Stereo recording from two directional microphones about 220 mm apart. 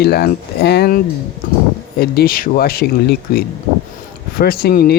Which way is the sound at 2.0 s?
45° left (ahead or behind).